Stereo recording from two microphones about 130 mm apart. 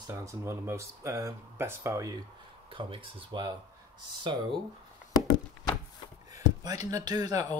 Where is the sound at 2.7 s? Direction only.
40° right (ahead or behind).